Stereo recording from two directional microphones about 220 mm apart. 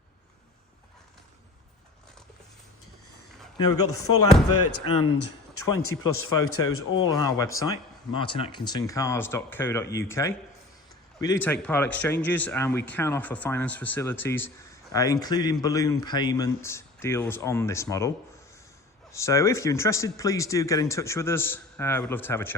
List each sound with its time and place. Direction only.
3.8 s speech: 85° left
6.7 s speech: 65° left (ahead or behind)
7.1 s speech: 15° left (ahead or behind)
19.1 s speech: 15° left (ahead or behind)